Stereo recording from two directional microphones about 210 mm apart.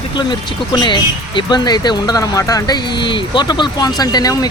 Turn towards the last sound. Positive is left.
turn(degrees=20)  # may be behind; listen again after turning